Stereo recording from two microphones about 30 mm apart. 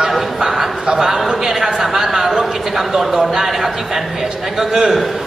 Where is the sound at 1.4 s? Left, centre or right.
Centre.